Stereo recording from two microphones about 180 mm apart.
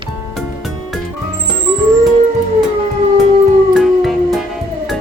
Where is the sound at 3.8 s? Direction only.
Centre (ahead or behind).